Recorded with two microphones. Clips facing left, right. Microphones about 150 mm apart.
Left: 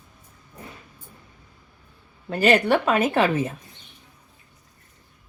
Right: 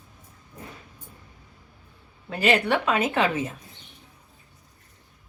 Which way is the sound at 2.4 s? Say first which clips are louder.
Left 4 dB; 45° left (ahead or behind).